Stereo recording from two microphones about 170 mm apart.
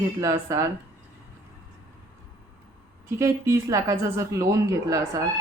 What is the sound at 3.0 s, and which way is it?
A woman's voice, 15° right (ahead or behind).